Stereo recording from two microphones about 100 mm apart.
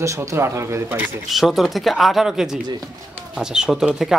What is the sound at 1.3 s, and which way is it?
A man's voice, centre (ahead or behind).